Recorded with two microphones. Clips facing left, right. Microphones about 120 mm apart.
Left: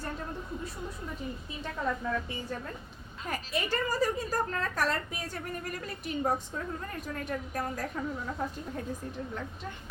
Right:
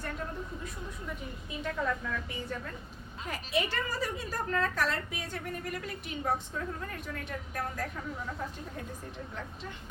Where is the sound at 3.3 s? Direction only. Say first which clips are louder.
Even; 45° left (ahead or behind).